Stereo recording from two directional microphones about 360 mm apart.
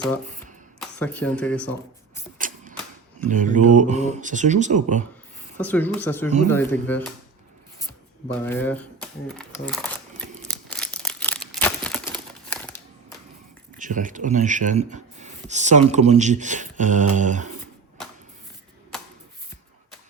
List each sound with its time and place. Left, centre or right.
0.8 s speech: centre
2.4 s a sound: right
3.2 s speech: right
5.5 s speech: centre
8.4 s speech: centre
10.5 s crumpling: centre
13.7 s speech: right